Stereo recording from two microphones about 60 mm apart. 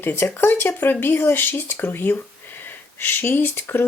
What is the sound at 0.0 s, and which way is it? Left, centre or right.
Speech, left.